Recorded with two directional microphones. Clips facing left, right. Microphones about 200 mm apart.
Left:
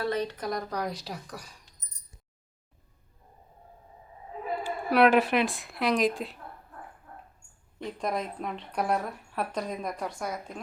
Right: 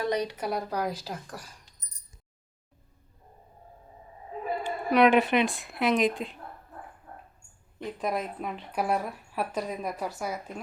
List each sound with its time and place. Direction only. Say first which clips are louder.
0.0 s speech: right 1 dB; 15° right (ahead or behind)
4.6 s a woman's voice: even; 5° left (ahead or behind)
7.8 s speech: right 1 dB; 5° right (ahead or behind)